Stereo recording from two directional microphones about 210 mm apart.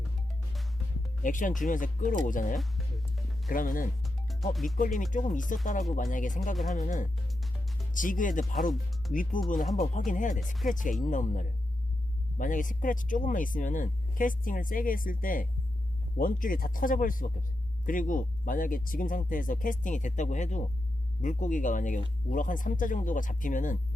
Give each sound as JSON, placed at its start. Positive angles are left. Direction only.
{"t": 1.2, "sound": "speech", "side_deg": 40}
{"t": 2.6, "sound": "music", "side_deg": 0}
{"t": 3.5, "sound": "speech", "side_deg": 40}
{"t": 4.0, "sound": "music", "side_deg": 0}
{"t": 4.5, "sound": "speech", "side_deg": 0}
{"t": 4.8, "sound": "speech", "side_deg": 40}
{"t": 6.6, "sound": "speech", "side_deg": 0}
{"t": 6.8, "sound": "speech", "side_deg": 35}
{"t": 8.7, "sound": "speech", "side_deg": 0}
{"t": 9.7, "sound": "speech", "side_deg": 35}